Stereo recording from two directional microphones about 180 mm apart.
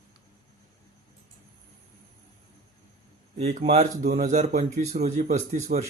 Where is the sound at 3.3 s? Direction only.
40° right (ahead or behind).